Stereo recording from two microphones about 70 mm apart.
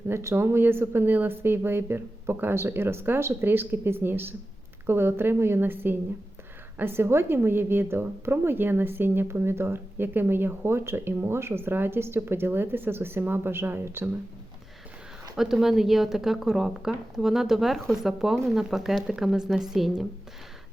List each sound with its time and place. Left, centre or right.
0.1 s a woman's voice: right
15.4 s a woman's voice: centre